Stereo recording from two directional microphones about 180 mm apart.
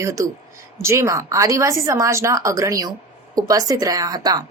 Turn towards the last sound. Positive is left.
turn(degrees=-20)  # may be behind; listen again after turning